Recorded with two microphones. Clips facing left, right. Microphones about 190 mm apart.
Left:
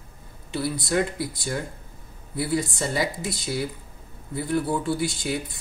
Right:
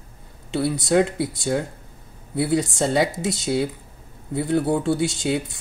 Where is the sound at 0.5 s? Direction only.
70° right (ahead or behind).